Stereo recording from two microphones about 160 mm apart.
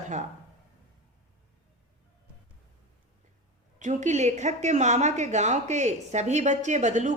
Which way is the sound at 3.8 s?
50° right (ahead or behind).